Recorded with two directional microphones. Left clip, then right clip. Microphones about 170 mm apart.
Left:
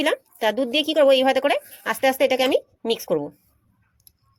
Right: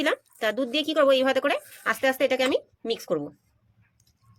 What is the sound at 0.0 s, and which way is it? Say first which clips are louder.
A woman's voice: left 4 dB; 20° left (ahead or behind).